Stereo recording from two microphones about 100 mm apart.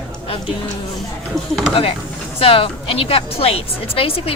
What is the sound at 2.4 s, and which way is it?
A woman's voice, 70° left (ahead or behind).